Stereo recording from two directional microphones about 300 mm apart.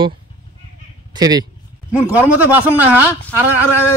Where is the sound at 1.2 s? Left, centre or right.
Centre.